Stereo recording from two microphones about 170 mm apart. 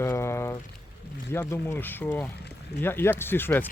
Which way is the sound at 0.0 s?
15° left (ahead or behind).